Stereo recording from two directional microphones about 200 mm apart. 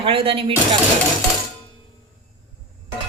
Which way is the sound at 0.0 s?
25° right (ahead or behind).